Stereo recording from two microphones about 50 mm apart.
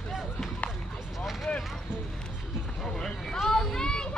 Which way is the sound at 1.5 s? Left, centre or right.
Left.